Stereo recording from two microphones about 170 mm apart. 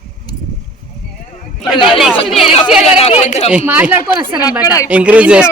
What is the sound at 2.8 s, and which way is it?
Speech, 35° left (ahead or behind).